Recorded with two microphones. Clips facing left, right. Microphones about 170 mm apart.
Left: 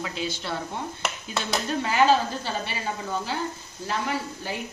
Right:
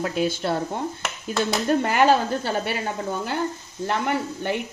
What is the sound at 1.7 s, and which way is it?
Speech, 55° right (ahead or behind).